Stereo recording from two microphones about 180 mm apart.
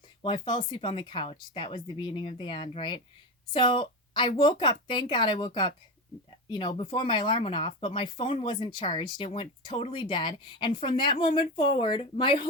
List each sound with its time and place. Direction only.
0.2 s speech: 25° left (ahead or behind)